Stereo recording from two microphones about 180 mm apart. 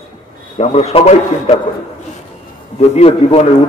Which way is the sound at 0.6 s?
35° left (ahead or behind).